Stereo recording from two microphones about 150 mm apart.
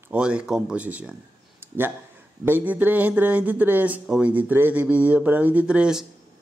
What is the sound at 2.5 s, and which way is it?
Speech, 10° right (ahead or behind).